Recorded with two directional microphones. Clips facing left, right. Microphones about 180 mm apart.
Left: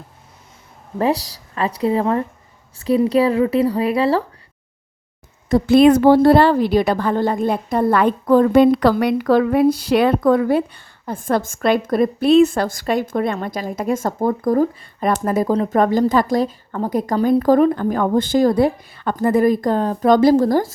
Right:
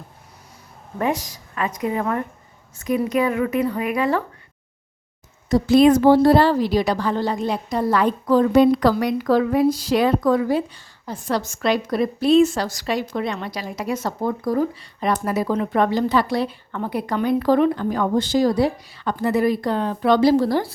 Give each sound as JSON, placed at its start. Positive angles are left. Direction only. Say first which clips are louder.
{"t": 0.9, "sound": "speech", "louder": "left 4 dB", "side_deg": 35}
{"t": 5.5, "sound": "a woman's voice", "louder": "left 2 dB", "side_deg": 55}